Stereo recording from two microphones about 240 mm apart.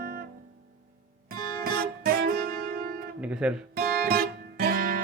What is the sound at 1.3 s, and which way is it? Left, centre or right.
Music, right.